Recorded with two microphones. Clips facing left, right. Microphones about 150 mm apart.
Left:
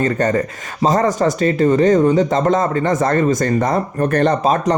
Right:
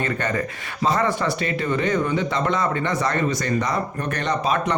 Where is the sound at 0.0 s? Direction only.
40° left (ahead or behind).